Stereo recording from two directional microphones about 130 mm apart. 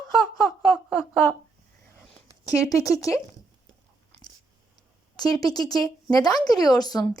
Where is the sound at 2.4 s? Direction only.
25° left (ahead or behind).